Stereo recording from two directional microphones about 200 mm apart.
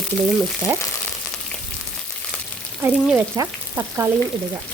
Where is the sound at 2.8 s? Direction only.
10° right (ahead or behind).